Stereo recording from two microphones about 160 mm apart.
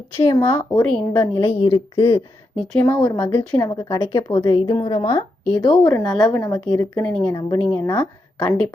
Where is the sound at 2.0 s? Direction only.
35° left (ahead or behind).